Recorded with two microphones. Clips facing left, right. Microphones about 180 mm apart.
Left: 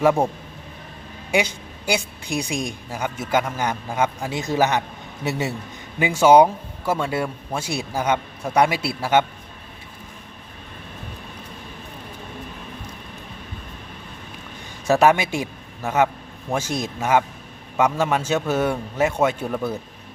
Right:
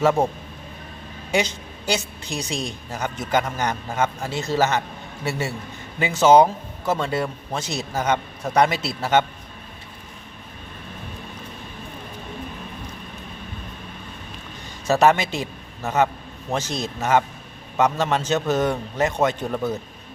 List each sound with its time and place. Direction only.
1.3 s a woman's voice: 10° left (ahead or behind)
14.8 s a man's voice: 10° left (ahead or behind)